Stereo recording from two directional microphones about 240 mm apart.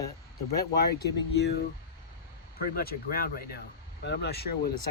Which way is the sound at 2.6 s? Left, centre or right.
Left.